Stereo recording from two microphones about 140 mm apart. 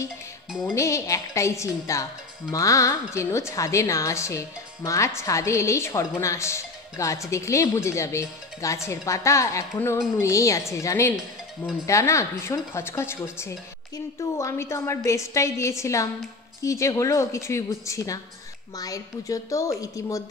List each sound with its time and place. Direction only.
0.5 s music: 5° right (ahead or behind)
0.7 s a woman's voice: 20° left (ahead or behind)